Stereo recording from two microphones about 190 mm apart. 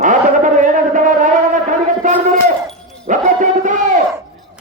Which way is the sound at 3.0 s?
40° right (ahead or behind).